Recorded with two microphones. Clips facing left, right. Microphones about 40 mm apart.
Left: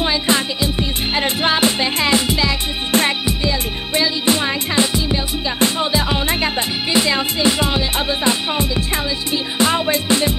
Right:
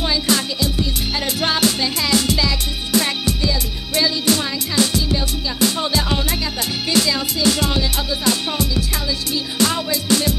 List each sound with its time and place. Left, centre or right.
0.0 s music: left
2.2 s music: centre